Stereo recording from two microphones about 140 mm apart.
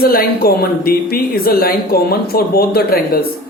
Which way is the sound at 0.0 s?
90° left.